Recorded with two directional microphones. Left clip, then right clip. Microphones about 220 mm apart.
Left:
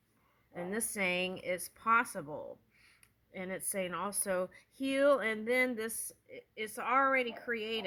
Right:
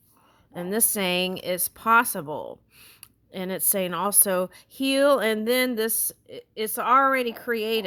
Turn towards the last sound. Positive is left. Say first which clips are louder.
# right 11 dB
turn(degrees=-40)  # may be behind; listen again after turning